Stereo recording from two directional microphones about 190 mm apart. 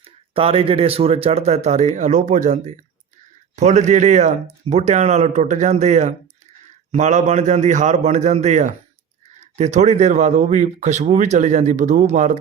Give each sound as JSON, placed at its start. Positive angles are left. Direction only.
{"t": 0.0, "sound": "speech", "side_deg": -30}